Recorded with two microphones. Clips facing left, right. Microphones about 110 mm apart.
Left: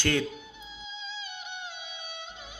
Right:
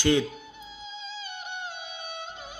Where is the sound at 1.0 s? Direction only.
45° right (ahead or behind).